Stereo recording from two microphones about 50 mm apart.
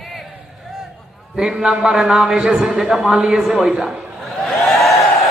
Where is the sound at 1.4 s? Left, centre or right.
Centre.